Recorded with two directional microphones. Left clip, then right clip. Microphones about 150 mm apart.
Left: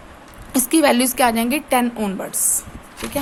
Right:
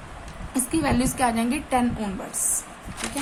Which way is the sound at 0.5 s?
85° left.